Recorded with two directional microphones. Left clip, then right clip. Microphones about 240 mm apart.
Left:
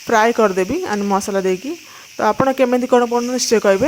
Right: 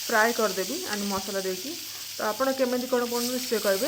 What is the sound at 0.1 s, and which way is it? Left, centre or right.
Speech, left.